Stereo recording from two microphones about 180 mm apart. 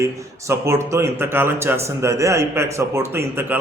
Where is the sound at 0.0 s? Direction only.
15° right (ahead or behind).